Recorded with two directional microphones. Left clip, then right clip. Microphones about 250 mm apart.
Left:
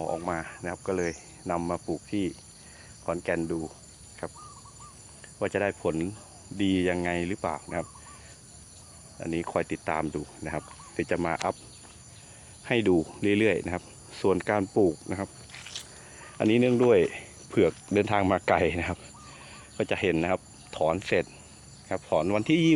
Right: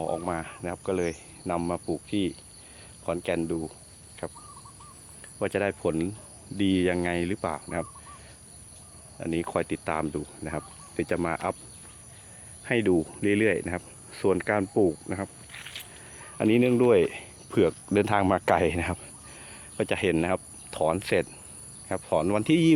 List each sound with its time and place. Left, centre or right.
0.0 s speech: right
5.4 s speech: centre
6.6 s cricket: centre
9.2 s speech: centre
12.6 s speech: centre
16.1 s speech: centre